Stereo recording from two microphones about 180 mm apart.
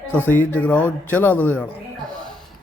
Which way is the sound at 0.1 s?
10° left (ahead or behind).